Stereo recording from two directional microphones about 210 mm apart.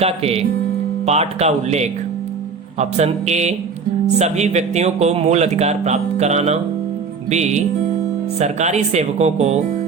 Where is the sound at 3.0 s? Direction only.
30° right (ahead or behind).